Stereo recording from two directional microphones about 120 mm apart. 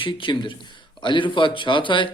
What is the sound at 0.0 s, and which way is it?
A man's voice, 45° left (ahead or behind).